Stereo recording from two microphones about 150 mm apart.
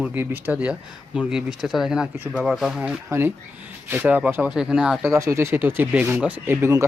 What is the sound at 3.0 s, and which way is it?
Speech, 15° right (ahead or behind).